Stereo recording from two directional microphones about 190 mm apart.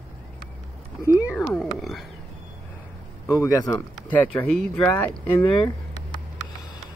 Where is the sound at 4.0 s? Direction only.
5° left (ahead or behind).